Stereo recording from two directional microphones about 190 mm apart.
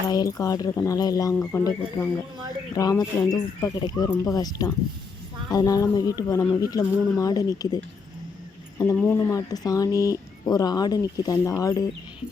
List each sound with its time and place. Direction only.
0.1 s speech: 20° left (ahead or behind)